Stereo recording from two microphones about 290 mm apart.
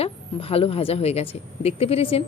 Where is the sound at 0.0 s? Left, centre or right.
Centre.